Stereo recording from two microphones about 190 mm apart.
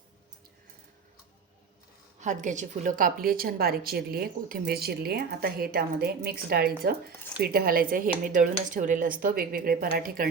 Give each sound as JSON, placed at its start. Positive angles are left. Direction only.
{"t": 2.2, "sound": "a woman's voice", "side_deg": -40}